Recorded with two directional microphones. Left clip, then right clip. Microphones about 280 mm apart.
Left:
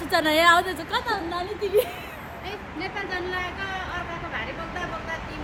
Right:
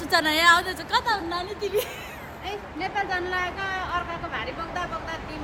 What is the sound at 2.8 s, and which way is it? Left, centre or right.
Speech, centre.